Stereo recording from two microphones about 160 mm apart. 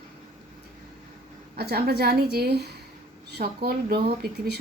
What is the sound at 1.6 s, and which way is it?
A woman's voice, 75° right (ahead or behind).